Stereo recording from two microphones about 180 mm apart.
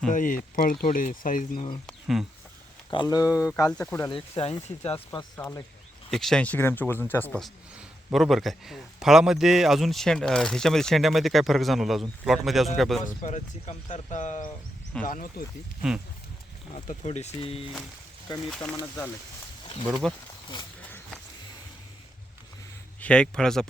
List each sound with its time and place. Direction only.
0.1 s speech: 45° left (ahead or behind)
1.9 s a sound: centre (ahead or behind)
2.9 s speech: 25° left (ahead or behind)
3.2 s a man's voice: 5° right (ahead or behind)
3.8 s speech: 15° left (ahead or behind)
4.1 s speech: 35° left (ahead or behind)
5.1 s speech: 15° left (ahead or behind)
6.1 s speech: centre (ahead or behind)
7.4 s a man's voice: centre (ahead or behind)
13.2 s speech: 40° left (ahead or behind)
16.7 s speech: 40° left (ahead or behind)
18.4 s a man's voice: 5° left (ahead or behind)
19.9 s a man's voice: centre (ahead or behind)
23.0 s a man's voice: 5° left (ahead or behind)